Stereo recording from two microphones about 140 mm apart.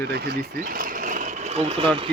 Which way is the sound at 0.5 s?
85° right.